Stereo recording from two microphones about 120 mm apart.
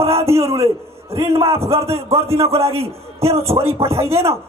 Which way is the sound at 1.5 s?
55° right (ahead or behind).